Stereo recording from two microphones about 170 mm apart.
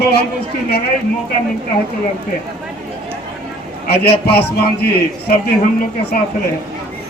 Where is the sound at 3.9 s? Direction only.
70° left (ahead or behind).